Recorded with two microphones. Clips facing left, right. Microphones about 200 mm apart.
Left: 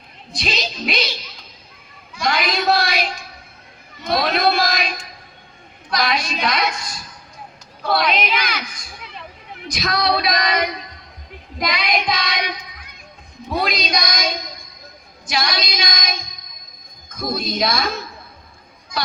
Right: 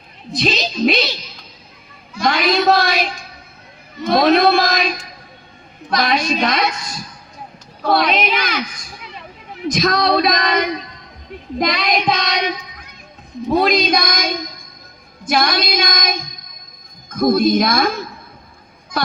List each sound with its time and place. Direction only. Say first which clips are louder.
0.3 s female singing: right 7 dB; 45° right (ahead or behind)
2.1 s a sound: right 5 dB; 45° right (ahead or behind)
4.0 s a man's voice: right 6 dB; 45° right (ahead or behind)
5.9 s female singing: right 4 dB; 45° right (ahead or behind)
7.8 s female singing: right 3 dB; 45° right (ahead or behind)
9.7 s female singing: right 4 dB; 45° right (ahead or behind)
18.9 s speech: right 5 dB; 50° right (ahead or behind)